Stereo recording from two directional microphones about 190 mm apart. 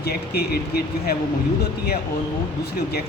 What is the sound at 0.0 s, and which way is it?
Speech, 55° left (ahead or behind).